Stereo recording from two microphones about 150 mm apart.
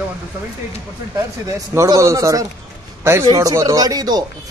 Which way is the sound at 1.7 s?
20° right (ahead or behind).